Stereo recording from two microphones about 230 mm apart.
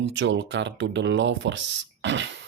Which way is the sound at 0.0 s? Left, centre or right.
Right.